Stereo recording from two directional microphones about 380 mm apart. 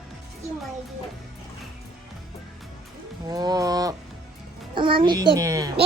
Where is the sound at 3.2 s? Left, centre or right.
Centre.